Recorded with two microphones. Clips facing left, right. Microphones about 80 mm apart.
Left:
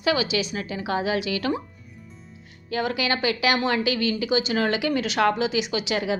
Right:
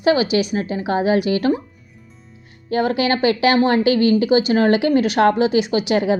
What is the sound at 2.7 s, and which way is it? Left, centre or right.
A woman's voice, right.